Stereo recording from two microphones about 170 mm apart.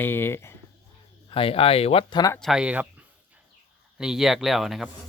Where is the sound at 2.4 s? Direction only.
Centre (ahead or behind).